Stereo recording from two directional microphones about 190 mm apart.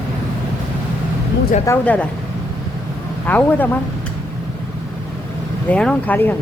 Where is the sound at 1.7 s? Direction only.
5° left (ahead or behind).